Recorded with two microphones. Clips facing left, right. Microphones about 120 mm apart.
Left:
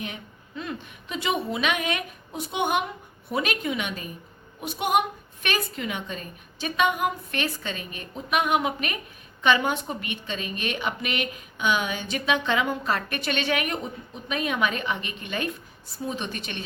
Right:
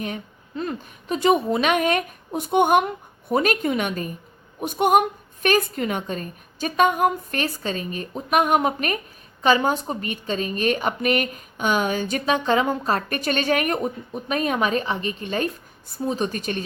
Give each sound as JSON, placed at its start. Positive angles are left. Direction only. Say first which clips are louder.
{"t": 0.0, "sound": "a woman's voice", "louder": "right 6 dB", "side_deg": -40}